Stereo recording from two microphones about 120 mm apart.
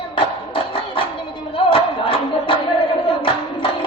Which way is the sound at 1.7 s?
50° left (ahead or behind).